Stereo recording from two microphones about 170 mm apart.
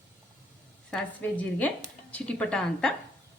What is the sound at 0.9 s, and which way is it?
A woman's voice, 10° left (ahead or behind).